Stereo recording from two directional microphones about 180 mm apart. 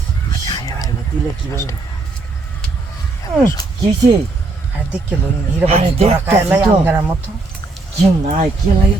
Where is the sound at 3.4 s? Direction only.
20° left (ahead or behind).